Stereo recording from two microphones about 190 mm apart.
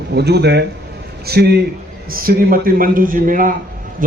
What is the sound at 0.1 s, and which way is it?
A man's voice, 60° right (ahead or behind).